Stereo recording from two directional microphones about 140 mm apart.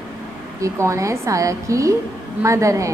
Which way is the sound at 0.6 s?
20° right (ahead or behind).